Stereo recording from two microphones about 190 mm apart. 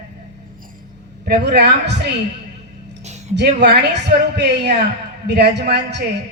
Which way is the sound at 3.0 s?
35° right (ahead or behind).